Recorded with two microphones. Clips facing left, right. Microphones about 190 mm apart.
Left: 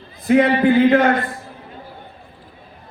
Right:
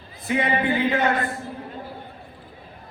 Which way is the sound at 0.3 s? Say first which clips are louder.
Left 9 dB; 90° left.